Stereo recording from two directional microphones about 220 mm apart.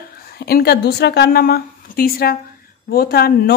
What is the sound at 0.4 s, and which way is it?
Speech, 45° left (ahead or behind).